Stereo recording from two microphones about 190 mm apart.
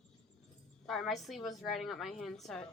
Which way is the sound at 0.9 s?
Centre (ahead or behind).